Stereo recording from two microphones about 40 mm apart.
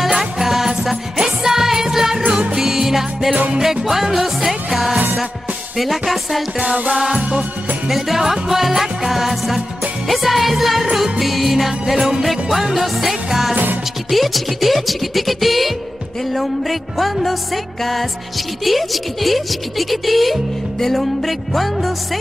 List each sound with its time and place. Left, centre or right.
0.0 s music: centre
3.6 s speech: centre
6.6 s music: right
7.0 s music: centre
7.9 s music: centre
10.0 s speech: centre
17.0 s speech: centre
18.6 s speech: centre